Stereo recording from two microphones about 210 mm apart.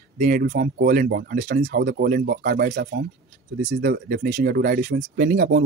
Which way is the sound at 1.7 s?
50° right (ahead or behind).